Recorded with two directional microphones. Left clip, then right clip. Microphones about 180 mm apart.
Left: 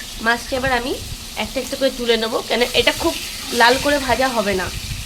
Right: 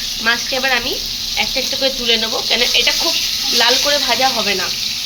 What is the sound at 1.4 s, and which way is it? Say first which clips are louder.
Sizzle: right 3 dB; 45° left (ahead or behind).